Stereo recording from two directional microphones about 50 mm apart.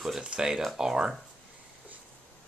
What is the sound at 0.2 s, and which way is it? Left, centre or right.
Speech, centre.